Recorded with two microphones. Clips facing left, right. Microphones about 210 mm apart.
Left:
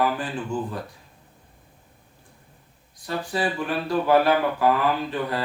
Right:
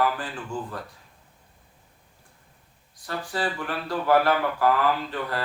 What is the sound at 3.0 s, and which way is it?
Speech, 20° left (ahead or behind).